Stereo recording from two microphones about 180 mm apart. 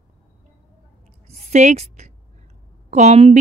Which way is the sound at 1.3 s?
35° right (ahead or behind).